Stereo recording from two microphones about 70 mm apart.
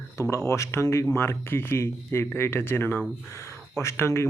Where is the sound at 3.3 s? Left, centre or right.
Left.